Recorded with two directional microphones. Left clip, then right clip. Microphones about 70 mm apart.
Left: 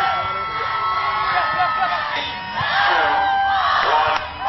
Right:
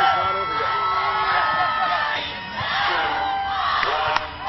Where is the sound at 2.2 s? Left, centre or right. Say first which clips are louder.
Left 4 dB; left.